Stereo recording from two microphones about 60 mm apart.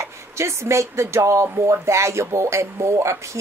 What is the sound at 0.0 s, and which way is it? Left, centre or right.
A woman's voice, right.